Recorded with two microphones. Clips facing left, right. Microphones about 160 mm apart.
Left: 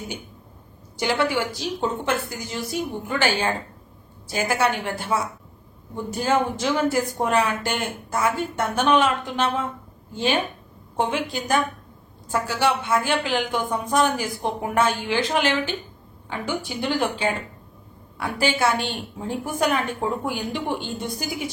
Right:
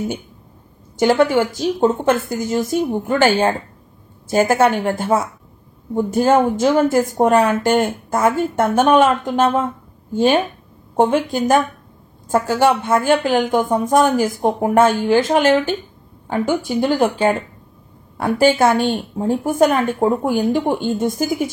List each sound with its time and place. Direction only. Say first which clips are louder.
0.9 s speech: right 9 dB; 45° right (ahead or behind)